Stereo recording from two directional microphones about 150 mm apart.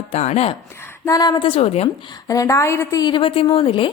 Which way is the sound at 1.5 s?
45° left (ahead or behind).